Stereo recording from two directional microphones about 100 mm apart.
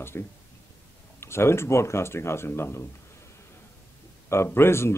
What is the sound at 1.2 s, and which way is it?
Speech, 25° left (ahead or behind).